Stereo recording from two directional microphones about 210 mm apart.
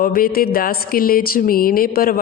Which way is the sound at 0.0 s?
45° left (ahead or behind).